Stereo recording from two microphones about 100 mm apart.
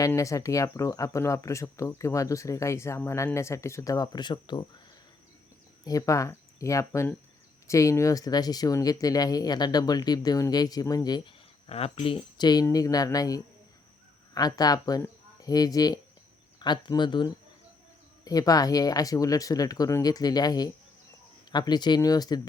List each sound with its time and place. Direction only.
0.2 s speech: 35° left (ahead or behind); by 4.6 s 50° left (ahead or behind)
5.8 s speech: 35° left (ahead or behind)
11.3 s speech: 75° left (ahead or behind)
12.4 s speech: 45° left (ahead or behind)
18.3 s speech: 40° left (ahead or behind)